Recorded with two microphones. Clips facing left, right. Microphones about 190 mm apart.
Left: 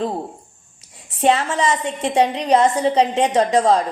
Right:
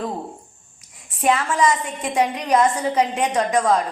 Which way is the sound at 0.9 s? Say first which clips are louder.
Left 3 dB; 30° left (ahead or behind).